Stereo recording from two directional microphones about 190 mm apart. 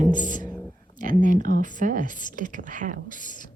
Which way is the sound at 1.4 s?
45° right (ahead or behind).